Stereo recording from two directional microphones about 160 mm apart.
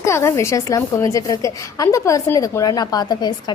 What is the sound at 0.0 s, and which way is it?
A woman's voice, 15° left (ahead or behind).